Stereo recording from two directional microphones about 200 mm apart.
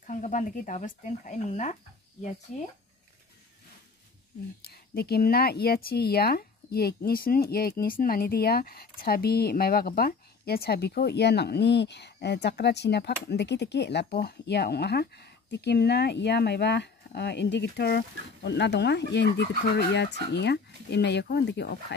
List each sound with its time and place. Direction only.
0.0 s speech: 40° left (ahead or behind)
4.6 s speech: 50° left (ahead or behind)